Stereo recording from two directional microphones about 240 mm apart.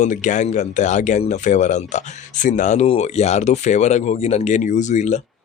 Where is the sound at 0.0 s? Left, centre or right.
Left.